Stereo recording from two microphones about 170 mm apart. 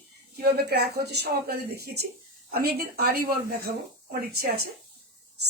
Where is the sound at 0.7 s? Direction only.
70° right (ahead or behind).